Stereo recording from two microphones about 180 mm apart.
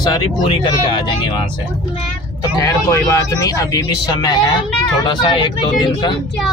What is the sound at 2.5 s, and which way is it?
Speech, 20° left (ahead or behind).